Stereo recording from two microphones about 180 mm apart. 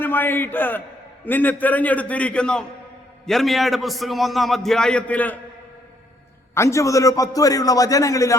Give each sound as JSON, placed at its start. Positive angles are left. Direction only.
{"t": 0.0, "sound": "a man's voice", "side_deg": 10}
{"t": 6.5, "sound": "a man's voice", "side_deg": 15}